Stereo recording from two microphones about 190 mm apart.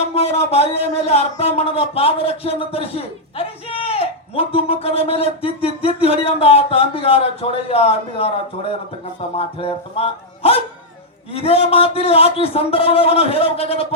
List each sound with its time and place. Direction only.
0.1 s speech: 35° left (ahead or behind)